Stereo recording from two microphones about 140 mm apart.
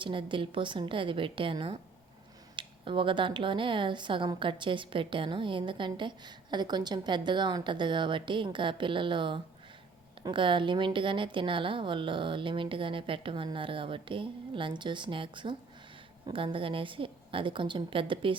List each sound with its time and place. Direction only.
0.0 s speech: 35° right (ahead or behind)